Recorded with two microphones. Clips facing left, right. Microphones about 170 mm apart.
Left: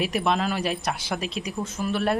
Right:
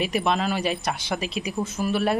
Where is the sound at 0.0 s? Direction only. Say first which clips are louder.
Even; centre (ahead or behind).